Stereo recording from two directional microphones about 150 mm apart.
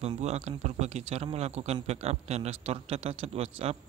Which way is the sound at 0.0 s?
45° right (ahead or behind).